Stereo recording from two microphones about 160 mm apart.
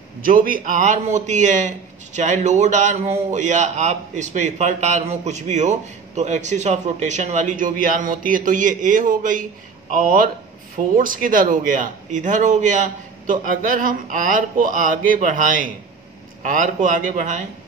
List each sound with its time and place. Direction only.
0.2 s a man's voice: 60° right (ahead or behind)